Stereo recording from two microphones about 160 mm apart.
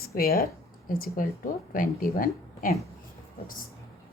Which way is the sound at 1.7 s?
60° left (ahead or behind).